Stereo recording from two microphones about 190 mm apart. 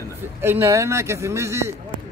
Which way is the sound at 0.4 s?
10° right (ahead or behind).